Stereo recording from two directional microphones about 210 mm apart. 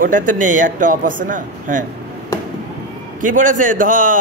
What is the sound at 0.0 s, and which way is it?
A man's voice, 40° right (ahead or behind).